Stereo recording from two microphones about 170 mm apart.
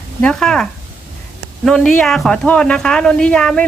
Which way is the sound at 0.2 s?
5° left (ahead or behind).